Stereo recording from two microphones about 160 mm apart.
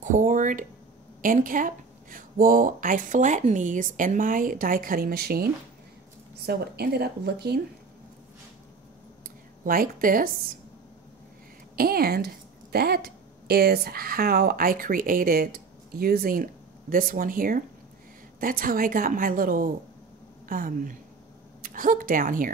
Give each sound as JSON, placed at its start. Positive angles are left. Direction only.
{"t": 0.0, "sound": "speech", "side_deg": -55}
{"t": 9.7, "sound": "speech", "side_deg": -60}
{"t": 11.7, "sound": "speech", "side_deg": -70}